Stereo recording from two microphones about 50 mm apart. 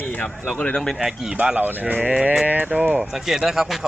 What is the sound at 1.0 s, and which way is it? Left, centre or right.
Speech, centre.